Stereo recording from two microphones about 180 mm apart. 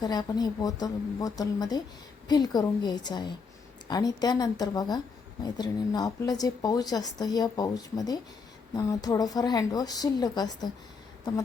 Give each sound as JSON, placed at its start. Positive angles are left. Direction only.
{"t": 0.0, "sound": "a woman's voice", "side_deg": 20}